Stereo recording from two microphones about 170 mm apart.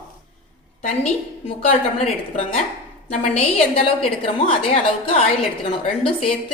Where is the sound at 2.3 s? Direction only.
35° left (ahead or behind).